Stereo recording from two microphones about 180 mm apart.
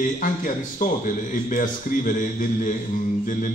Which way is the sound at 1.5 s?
50° left (ahead or behind).